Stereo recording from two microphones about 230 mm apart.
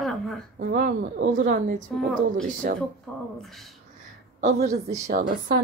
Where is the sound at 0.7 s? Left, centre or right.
Right.